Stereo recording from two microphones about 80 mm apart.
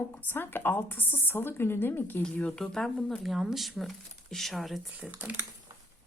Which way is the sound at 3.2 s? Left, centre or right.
Centre.